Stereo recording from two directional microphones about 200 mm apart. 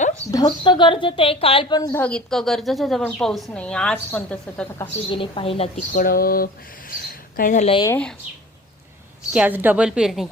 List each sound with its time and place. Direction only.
0.3 s a woman's voice: 20° left (ahead or behind)
5.1 s a woman's voice: 25° left (ahead or behind)
5.9 s speech: 45° left (ahead or behind); by 7.9 s 30° left (ahead or behind)
7.9 s a woman's voice: 5° left (ahead or behind)
9.3 s a woman's voice: 5° right (ahead or behind)